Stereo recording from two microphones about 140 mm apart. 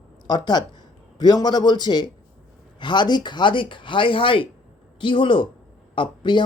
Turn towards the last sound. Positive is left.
turn(degrees=35)  # may be behind; listen again after turning